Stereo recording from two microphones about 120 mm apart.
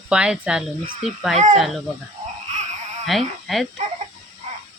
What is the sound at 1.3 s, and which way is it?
Speech, 90° right.